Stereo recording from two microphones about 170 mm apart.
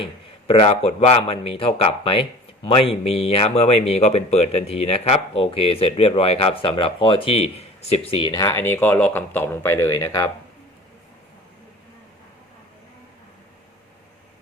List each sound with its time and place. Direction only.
0.0 s speech: 35° left (ahead or behind)
8.3 s speech: 20° left (ahead or behind)